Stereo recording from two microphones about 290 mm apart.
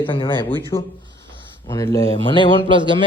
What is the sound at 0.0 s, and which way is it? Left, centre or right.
A man's voice, centre.